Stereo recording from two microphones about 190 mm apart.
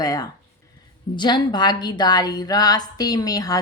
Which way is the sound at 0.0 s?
20° left (ahead or behind).